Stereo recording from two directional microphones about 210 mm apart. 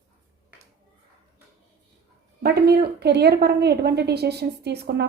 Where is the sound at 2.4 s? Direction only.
50° right (ahead or behind).